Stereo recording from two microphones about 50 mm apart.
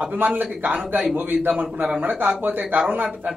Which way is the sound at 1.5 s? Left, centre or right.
Centre.